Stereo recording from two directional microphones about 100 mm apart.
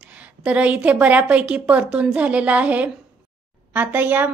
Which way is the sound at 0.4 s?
15° right (ahead or behind).